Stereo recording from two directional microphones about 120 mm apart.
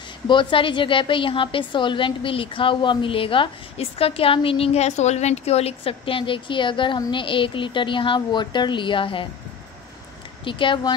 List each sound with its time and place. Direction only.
0.3 s a woman's voice: 45° left (ahead or behind)
10.4 s a woman's voice: 45° left (ahead or behind)